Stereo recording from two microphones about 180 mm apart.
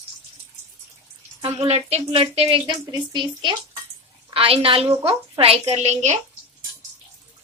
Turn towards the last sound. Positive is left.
turn(degrees=-40)  # may be behind; listen again after turning